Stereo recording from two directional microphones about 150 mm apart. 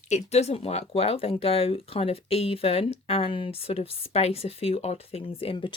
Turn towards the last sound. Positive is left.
turn(degrees=35)  # may be behind; listen again after turning